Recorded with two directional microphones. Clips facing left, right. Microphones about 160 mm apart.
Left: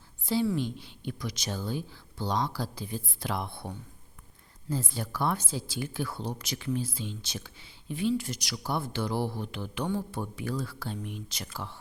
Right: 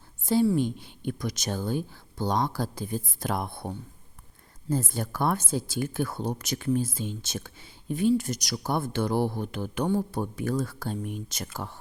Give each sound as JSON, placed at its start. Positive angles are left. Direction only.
{"t": 0.5, "sound": "speech", "side_deg": -50}
{"t": 4.7, "sound": "speech", "side_deg": -45}